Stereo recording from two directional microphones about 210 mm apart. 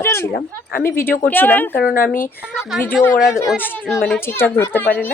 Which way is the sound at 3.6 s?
10° left (ahead or behind).